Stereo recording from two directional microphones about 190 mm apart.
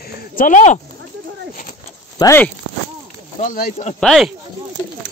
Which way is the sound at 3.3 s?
45° left (ahead or behind).